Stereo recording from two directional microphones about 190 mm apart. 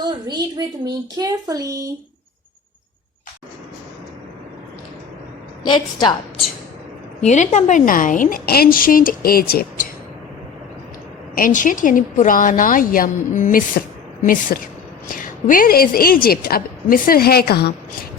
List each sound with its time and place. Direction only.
0.0 s a child's voice: 20° right (ahead or behind)
5.7 s a woman's voice: 25° left (ahead or behind)
7.2 s a woman's voice: 35° left (ahead or behind); by 9.8 s 50° left (ahead or behind)
11.3 s a woman's voice: 45° left (ahead or behind)